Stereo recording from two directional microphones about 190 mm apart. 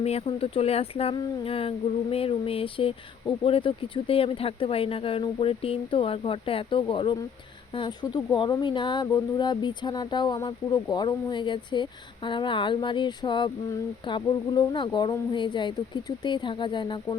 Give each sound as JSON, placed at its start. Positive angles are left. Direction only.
{"t": 0.0, "sound": "speech", "side_deg": 30}